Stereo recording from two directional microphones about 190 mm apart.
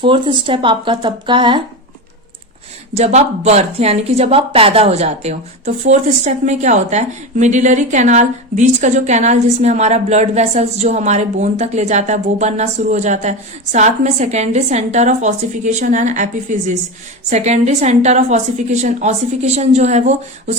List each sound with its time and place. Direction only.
0.0 s speech: 25° right (ahead or behind)
2.9 s a woman's voice: 35° right (ahead or behind)